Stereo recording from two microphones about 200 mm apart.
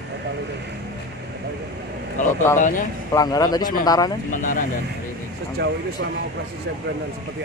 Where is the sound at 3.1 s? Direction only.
20° left (ahead or behind).